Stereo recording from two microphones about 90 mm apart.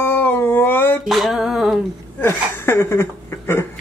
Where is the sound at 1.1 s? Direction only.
Centre (ahead or behind).